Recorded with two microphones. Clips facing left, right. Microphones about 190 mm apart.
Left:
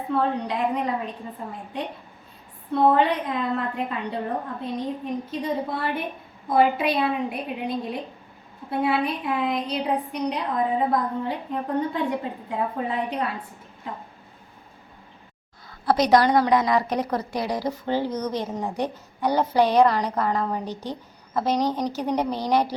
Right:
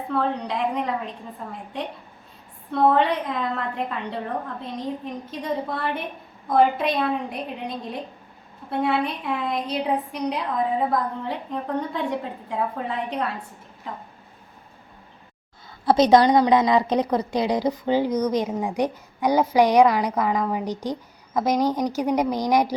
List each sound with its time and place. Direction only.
0.1 s a woman's voice: centre (ahead or behind)
2.7 s a woman's voice: centre (ahead or behind)
15.9 s a woman's voice: 25° right (ahead or behind)